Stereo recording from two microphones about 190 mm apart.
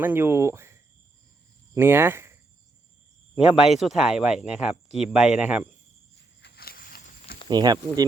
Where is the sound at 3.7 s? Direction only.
Centre (ahead or behind).